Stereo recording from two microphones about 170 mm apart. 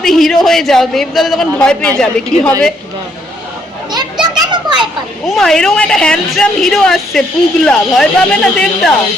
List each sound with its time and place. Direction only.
0.0 s a woman's voice: centre (ahead or behind)
4.4 s children playing: 25° right (ahead or behind)
5.2 s a woman's voice: centre (ahead or behind)